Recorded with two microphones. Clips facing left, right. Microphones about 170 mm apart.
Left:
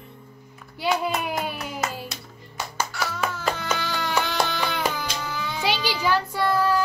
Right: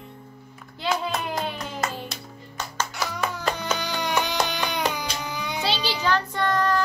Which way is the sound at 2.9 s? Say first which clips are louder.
Even; 15° right (ahead or behind).